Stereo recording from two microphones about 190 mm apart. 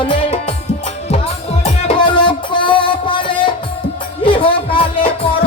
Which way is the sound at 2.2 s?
25° left (ahead or behind).